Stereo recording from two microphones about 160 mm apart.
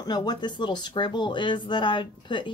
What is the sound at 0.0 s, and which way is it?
Speech, 25° left (ahead or behind).